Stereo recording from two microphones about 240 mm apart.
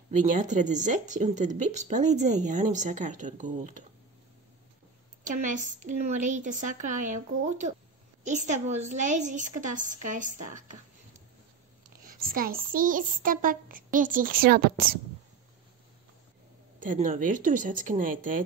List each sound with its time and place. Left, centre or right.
0.1 s speech: right
5.2 s speech: right
12.2 s speech: right
16.8 s speech: right